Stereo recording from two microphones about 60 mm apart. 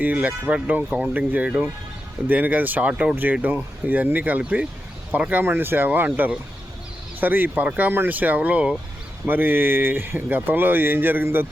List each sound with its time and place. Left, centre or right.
0.0 s speech: right
9.2 s speech: right